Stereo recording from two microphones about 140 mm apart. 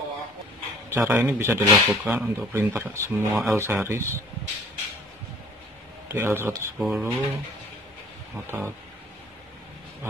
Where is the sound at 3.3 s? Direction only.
Centre (ahead or behind).